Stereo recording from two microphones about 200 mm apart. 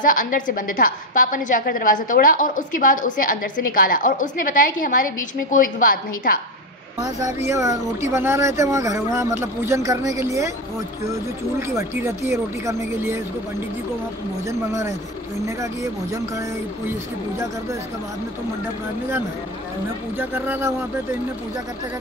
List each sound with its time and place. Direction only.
0.0 s a woman's voice: 45° left (ahead or behind)
7.0 s speech: 20° right (ahead or behind)
11.6 s speech: 15° right (ahead or behind)
15.4 s speech: 15° right (ahead or behind)
20.2 s speech: 10° right (ahead or behind)